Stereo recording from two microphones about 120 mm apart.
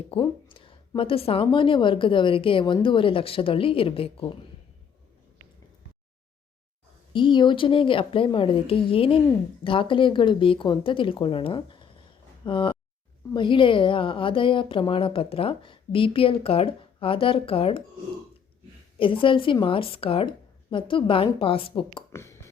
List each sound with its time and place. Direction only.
0.1 s a woman's voice: 45° left (ahead or behind)
7.1 s a woman's voice: 40° left (ahead or behind)
18.9 s a woman's voice: 45° left (ahead or behind)
22.1 s a sound: 25° left (ahead or behind)